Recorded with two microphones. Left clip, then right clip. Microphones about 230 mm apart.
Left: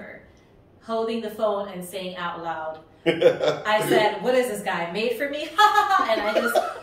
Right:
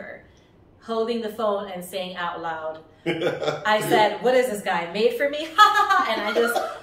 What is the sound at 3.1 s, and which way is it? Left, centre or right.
Speech, centre.